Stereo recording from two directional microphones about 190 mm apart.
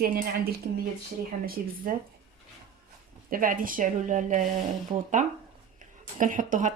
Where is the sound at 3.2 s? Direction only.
45° right (ahead or behind).